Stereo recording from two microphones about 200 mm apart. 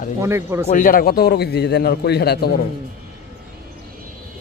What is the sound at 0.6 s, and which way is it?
A man's voice, 40° left (ahead or behind).